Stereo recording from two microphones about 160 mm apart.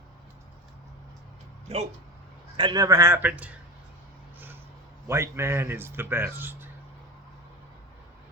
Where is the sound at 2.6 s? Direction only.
25° right (ahead or behind); by 3.5 s 10° right (ahead or behind).